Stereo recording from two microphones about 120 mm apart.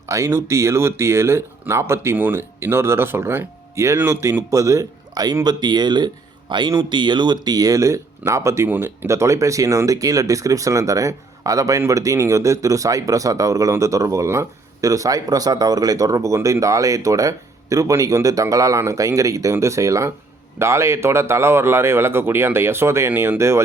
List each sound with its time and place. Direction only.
0.0 s speech: 25° right (ahead or behind)